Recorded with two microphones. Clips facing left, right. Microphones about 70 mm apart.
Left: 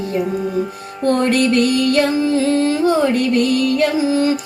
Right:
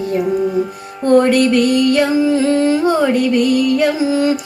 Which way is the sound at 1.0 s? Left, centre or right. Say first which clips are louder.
Right 4 dB; centre.